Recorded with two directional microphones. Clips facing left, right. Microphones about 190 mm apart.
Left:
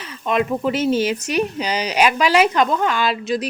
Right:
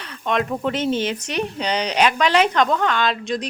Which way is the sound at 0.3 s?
5° left (ahead or behind).